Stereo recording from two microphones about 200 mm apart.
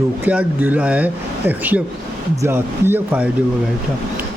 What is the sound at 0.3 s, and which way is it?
Speech, 5° right (ahead or behind).